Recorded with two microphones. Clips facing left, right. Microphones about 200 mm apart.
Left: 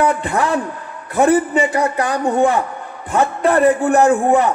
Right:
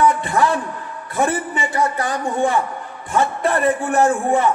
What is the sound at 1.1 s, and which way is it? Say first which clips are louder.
Speech: left 7 dB; 65° left (ahead or behind).